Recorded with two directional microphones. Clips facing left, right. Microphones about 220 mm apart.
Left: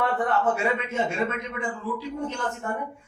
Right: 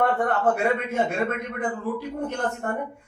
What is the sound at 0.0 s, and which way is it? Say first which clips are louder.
A man's voice: right 2 dB; 55° right (ahead or behind).